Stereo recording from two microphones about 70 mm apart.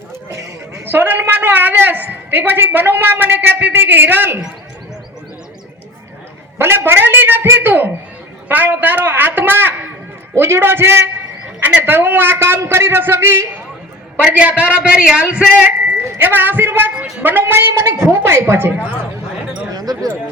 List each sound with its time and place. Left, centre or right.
0.1 s a sound: right
0.9 s a woman's voice: right
6.6 s a man's voice: right
14.2 s a man's voice: centre
15.9 s a man's voice: right
19.7 s a sound: right